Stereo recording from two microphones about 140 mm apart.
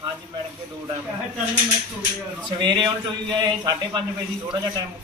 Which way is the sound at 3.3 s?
30° right (ahead or behind).